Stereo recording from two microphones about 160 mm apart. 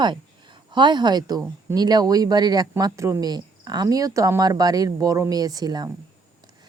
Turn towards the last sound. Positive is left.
turn(degrees=-25)  # may be behind; listen again after turning